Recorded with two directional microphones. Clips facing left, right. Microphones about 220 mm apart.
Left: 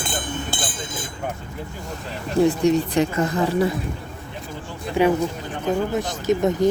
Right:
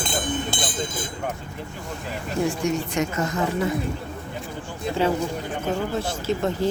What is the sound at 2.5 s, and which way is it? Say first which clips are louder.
Speech: left 6 dB; 35° left (ahead or behind).